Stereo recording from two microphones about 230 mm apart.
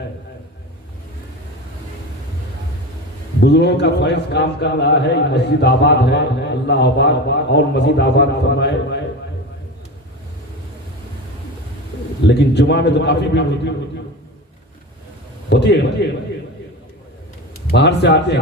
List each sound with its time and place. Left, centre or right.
3.4 s a man's voice: left
12.2 s a man's voice: left
15.4 s a man's voice: left
17.7 s a man's voice: left